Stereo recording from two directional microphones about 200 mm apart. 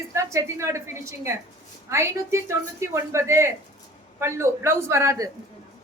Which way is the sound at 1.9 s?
15° right (ahead or behind).